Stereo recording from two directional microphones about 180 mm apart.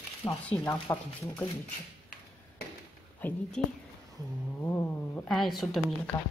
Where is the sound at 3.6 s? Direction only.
5° left (ahead or behind).